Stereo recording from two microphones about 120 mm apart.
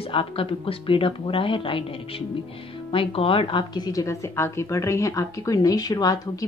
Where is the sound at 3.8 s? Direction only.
25° left (ahead or behind).